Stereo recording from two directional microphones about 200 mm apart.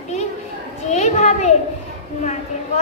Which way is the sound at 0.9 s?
35° left (ahead or behind).